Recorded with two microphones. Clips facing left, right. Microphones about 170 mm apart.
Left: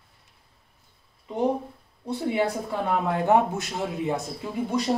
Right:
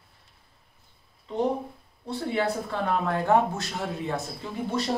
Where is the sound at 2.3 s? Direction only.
15° left (ahead or behind).